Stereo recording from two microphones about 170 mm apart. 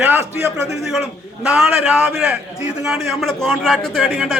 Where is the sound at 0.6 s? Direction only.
Centre (ahead or behind).